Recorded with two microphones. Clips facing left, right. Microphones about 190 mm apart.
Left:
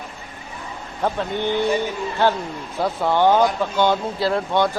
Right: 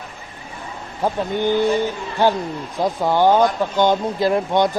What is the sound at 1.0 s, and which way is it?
Speech, 10° right (ahead or behind).